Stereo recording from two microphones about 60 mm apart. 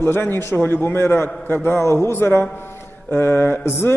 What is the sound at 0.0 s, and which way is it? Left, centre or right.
A man's voice, left.